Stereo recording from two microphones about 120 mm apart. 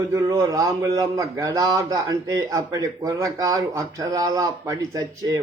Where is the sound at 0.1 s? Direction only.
30° right (ahead or behind).